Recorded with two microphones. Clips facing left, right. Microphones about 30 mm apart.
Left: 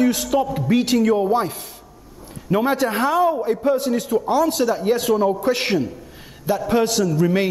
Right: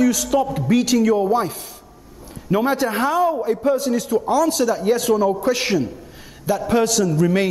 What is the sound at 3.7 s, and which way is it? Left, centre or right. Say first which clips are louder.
A woman's voice: right 1 dB; left.